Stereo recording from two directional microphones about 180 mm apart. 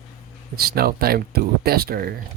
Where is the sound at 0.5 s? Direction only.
60° right (ahead or behind).